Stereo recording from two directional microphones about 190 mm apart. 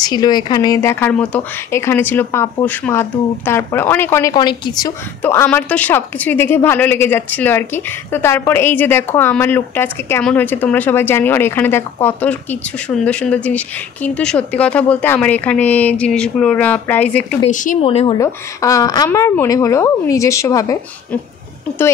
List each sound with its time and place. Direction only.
0.0 s a woman's voice: 20° left (ahead or behind)
5.2 s a woman's voice: 10° left (ahead or behind)
17.5 s speech: 40° left (ahead or behind)
17.8 s speech: 30° left (ahead or behind)
18.2 s a woman's voice: 15° left (ahead or behind)